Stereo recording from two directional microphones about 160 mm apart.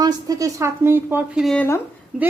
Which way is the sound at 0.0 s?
20° right (ahead or behind).